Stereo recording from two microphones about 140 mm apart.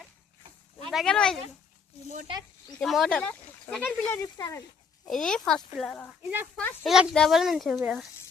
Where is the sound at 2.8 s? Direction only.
Centre (ahead or behind); by 4.6 s 25° left (ahead or behind).